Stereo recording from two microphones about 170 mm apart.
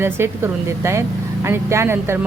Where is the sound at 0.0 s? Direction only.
15° right (ahead or behind).